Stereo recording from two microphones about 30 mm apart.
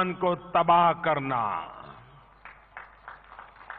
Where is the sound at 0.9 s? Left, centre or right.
Centre.